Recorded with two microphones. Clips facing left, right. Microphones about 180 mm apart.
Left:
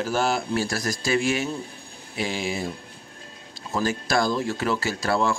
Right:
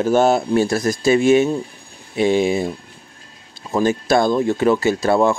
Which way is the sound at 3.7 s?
20° right (ahead or behind).